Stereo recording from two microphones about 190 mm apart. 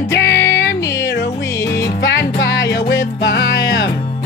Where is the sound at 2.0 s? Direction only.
70° left (ahead or behind).